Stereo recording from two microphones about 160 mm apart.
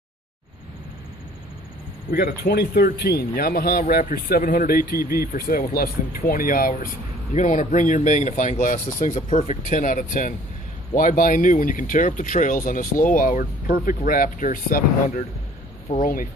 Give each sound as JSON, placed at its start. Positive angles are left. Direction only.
{"t": 2.0, "sound": "speech", "side_deg": 70}
{"t": 7.3, "sound": "speech", "side_deg": 50}